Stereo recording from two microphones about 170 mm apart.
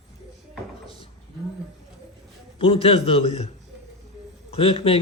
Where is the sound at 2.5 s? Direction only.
35° left (ahead or behind).